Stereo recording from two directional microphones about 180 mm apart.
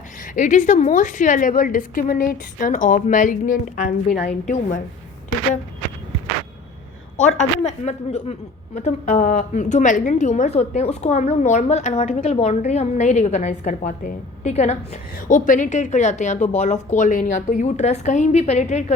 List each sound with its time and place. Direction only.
0.3 s a woman's voice: 45° left (ahead or behind)
7.6 s a woman's voice: 40° left (ahead or behind)